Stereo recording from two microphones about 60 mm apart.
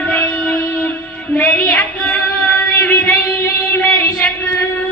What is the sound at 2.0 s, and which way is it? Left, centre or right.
Female singing, left.